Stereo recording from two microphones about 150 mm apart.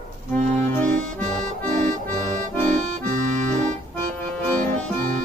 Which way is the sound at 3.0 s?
55° right (ahead or behind).